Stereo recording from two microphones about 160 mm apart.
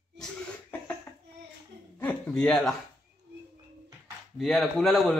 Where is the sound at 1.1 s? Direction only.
10° left (ahead or behind).